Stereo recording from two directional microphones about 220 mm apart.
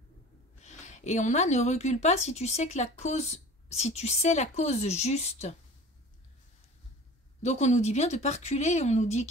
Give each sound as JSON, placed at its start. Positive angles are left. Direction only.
{"t": 0.6, "sound": "a woman's voice", "side_deg": 30}
{"t": 7.4, "sound": "a woman's voice", "side_deg": 30}